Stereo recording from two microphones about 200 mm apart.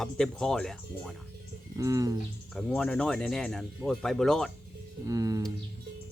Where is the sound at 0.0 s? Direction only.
Centre (ahead or behind).